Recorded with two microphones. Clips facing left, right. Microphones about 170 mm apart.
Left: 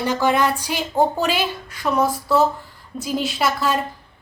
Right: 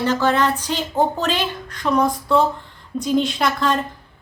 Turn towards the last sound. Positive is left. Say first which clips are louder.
# right 1 dB
turn(degrees=5)  # may be behind; listen again after turning